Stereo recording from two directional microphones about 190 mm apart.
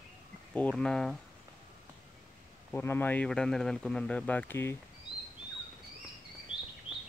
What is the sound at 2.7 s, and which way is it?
A man's voice, 10° left (ahead or behind).